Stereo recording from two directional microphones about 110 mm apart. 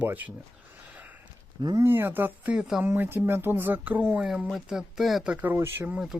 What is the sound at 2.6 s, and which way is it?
Speech, 5° right (ahead or behind).